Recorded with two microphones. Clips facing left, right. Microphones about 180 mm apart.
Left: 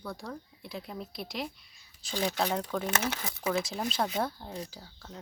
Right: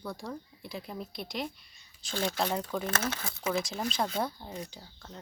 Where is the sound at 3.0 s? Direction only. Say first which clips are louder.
Left 1 dB; 15° left (ahead or behind).